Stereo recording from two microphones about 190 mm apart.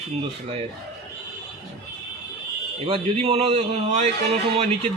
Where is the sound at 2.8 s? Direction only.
30° right (ahead or behind).